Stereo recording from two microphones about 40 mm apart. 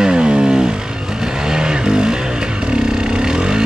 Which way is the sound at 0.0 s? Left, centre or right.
Right.